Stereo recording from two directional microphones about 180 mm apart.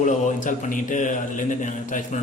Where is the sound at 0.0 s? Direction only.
45° left (ahead or behind).